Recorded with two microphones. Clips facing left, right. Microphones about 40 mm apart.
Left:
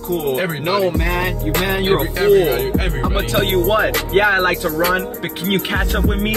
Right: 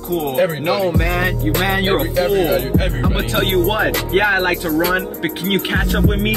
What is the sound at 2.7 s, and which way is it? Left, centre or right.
Speech, centre.